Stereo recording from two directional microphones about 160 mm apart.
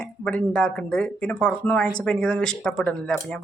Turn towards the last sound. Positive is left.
turn(degrees=5)  # may be behind; listen again after turning